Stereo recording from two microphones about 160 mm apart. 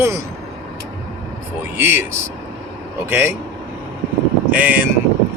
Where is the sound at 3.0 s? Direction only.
15° right (ahead or behind).